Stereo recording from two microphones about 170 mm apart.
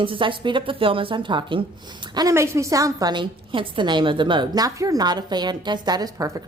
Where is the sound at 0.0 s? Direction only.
30° right (ahead or behind).